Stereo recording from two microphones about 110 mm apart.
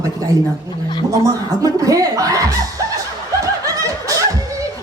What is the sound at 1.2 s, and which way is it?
A man's voice, 35° right (ahead or behind).